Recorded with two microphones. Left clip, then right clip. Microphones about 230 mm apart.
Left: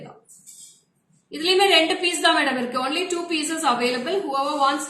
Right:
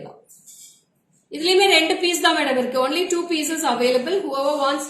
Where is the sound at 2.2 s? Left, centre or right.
Centre.